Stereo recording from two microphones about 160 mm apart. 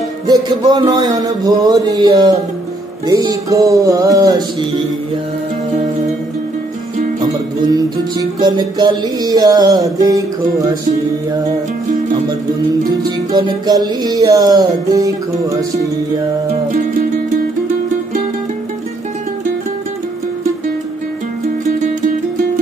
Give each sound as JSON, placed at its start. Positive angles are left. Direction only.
{"t": 0.3, "sound": "music", "side_deg": -25}
{"t": 7.7, "sound": "music", "side_deg": -25}
{"t": 13.0, "sound": "music", "side_deg": -25}